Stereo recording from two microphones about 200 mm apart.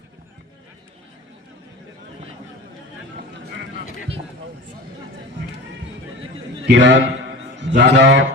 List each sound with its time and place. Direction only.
6.7 s a man's voice: 65° right (ahead or behind)